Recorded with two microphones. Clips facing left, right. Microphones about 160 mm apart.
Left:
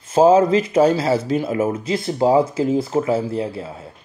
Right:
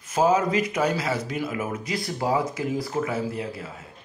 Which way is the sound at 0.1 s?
30° left (ahead or behind).